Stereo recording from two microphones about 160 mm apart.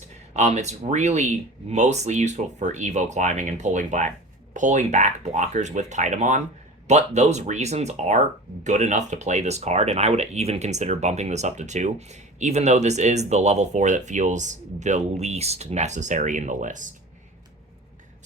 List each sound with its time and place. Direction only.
0.3 s speech: 45° right (ahead or behind)